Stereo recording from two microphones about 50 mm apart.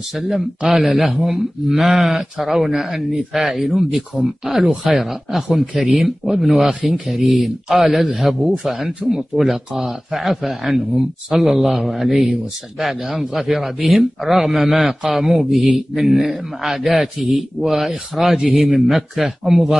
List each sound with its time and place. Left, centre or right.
0.1 s speech: centre
6.7 s speech: centre
7.1 s speech: centre